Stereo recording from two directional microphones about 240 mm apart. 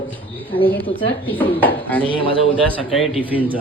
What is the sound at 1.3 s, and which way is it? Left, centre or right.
Speech, centre.